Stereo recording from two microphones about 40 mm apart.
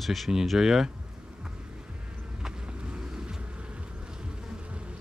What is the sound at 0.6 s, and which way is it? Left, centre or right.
Speech, centre.